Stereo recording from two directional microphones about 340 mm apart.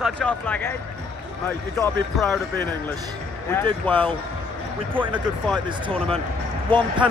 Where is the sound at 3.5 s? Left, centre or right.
Centre.